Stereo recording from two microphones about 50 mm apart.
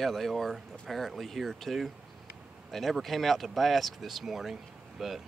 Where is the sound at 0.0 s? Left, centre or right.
Centre.